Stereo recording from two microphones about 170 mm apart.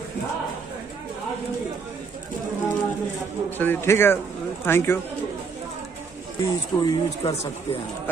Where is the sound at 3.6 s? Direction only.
15° left (ahead or behind).